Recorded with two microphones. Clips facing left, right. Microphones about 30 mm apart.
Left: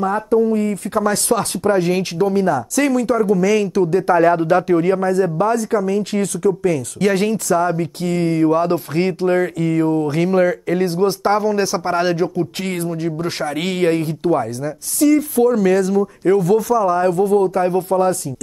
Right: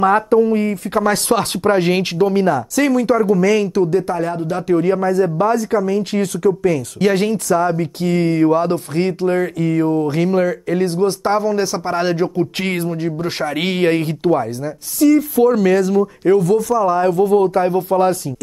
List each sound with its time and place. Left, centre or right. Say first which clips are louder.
0.3 s speech: right 2 dB; right
2.7 s speech: right 2 dB; centre
4.1 s speech: left 7 dB; left
4.6 s speech: left 1 dB; centre
12.6 s speech: right 2 dB; right
13.0 s speech: right 1 dB; centre
14.3 s speech: right 1 dB; centre
16.3 s speech: left 1 dB; centre
16.7 s speech: right 1 dB; centre